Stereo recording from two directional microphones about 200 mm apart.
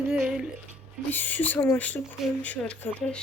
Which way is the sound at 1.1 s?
10° left (ahead or behind).